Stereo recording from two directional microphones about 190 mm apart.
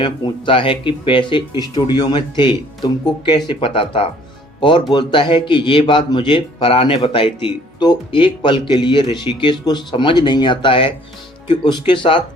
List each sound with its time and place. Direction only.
0.0 s a man's voice: 25° left (ahead or behind)